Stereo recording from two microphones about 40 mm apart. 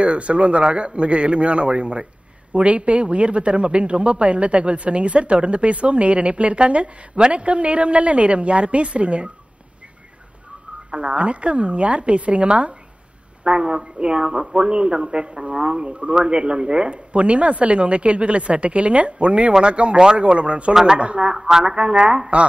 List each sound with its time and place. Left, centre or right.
0.0 s a man's voice: right
10.9 s a man's voice: right
20.7 s a woman's voice: centre
21.0 s a man's voice: right
21.3 s a woman's voice: centre